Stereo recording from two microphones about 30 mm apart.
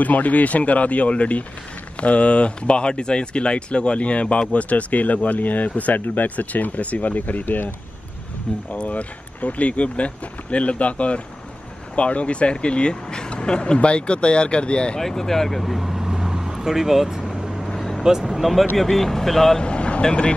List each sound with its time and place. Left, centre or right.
0.0 s speech: left
8.5 s speech: left
8.8 s speech: left
15.0 s speech: centre
15.8 s vehicle: centre
18.2 s speech: centre
18.8 s speech: centre
19.6 s speech: left